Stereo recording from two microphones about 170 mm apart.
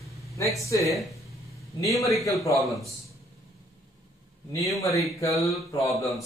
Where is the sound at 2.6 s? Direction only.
Centre (ahead or behind).